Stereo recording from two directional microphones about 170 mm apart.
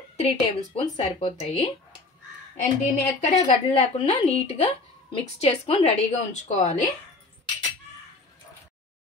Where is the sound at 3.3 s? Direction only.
45° left (ahead or behind).